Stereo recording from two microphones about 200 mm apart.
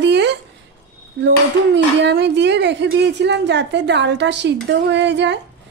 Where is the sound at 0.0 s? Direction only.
60° right (ahead or behind).